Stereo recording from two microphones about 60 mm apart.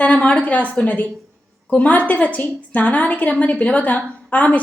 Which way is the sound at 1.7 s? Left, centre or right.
Left.